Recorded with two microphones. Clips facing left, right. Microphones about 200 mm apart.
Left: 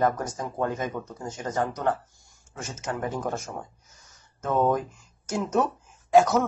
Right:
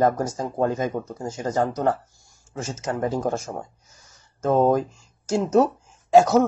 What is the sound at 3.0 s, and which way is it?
A man's voice, 35° right (ahead or behind).